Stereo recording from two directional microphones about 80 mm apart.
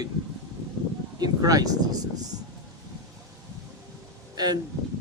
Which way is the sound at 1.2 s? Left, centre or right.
Right.